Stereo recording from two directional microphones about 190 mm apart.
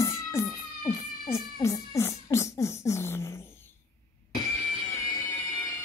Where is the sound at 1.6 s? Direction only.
15° left (ahead or behind).